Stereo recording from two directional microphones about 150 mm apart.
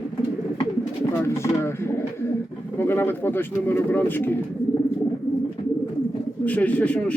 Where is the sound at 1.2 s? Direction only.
20° left (ahead or behind).